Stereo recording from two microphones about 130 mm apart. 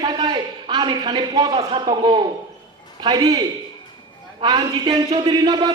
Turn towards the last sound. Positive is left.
turn(degrees=-35)  # may be behind; listen again after turning